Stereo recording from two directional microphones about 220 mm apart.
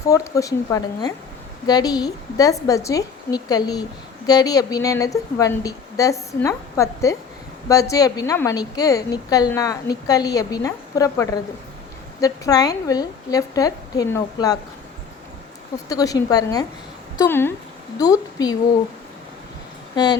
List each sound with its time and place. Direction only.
0.1 s a woman's voice: 15° left (ahead or behind)
15.9 s a woman's voice: 15° left (ahead or behind)